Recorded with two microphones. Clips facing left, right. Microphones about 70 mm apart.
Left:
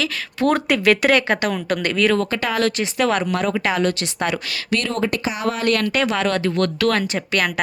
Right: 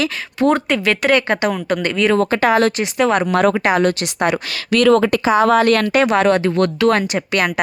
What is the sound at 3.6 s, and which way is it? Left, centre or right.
Speech, right.